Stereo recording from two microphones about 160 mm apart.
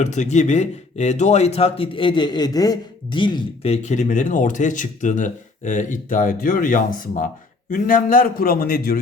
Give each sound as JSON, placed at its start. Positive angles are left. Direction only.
{"t": 0.0, "sound": "a man's voice", "side_deg": 50}